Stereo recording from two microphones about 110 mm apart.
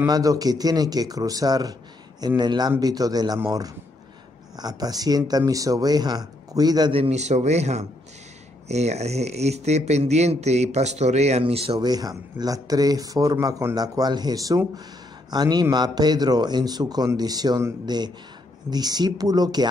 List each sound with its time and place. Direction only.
0.0 s a man's voice: 30° right (ahead or behind)
6.9 s speech: 70° right (ahead or behind)
11.8 s a man's voice: 35° right (ahead or behind)